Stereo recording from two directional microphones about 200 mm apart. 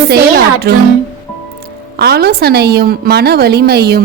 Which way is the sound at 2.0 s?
55° right (ahead or behind).